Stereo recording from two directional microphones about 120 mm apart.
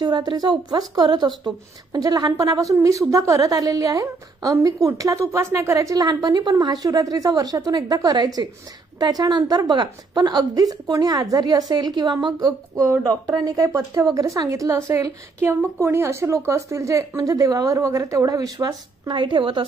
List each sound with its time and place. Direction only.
0.0 s speech: 35° right (ahead or behind)